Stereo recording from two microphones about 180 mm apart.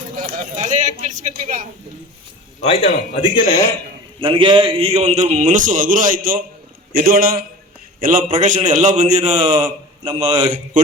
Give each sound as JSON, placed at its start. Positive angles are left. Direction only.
{"t": 0.5, "sound": "a sound", "side_deg": -40}
{"t": 2.6, "sound": "a man's voice", "side_deg": 35}
{"t": 4.2, "sound": "a man's voice", "side_deg": -30}
{"t": 9.3, "sound": "speech", "side_deg": -20}